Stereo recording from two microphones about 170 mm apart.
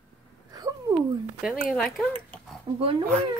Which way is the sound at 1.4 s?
5° left (ahead or behind).